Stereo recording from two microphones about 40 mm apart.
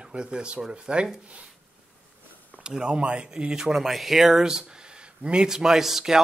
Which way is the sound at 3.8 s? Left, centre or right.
Centre.